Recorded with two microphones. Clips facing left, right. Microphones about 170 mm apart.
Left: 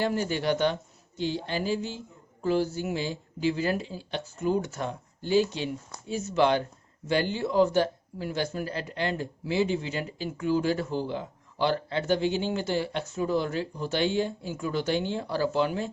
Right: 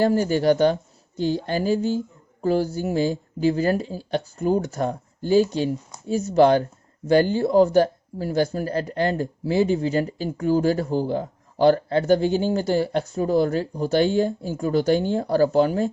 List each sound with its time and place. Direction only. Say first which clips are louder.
0.0 s speech: right 8 dB; 40° right (ahead or behind)